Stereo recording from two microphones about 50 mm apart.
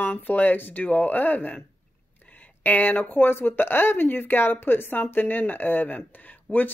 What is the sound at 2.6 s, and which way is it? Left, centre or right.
Speech, left.